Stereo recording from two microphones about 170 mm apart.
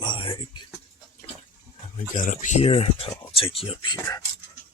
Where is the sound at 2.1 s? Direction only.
50° left (ahead or behind); by 4.2 s 20° left (ahead or behind).